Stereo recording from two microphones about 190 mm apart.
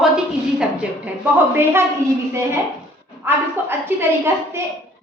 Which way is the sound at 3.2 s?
10° right (ahead or behind).